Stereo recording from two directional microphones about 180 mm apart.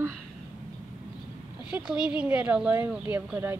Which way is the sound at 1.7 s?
5° right (ahead or behind).